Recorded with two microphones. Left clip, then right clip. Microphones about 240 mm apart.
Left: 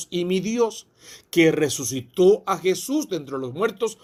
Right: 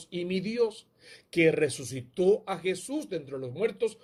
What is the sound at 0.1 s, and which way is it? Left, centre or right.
Speech, left.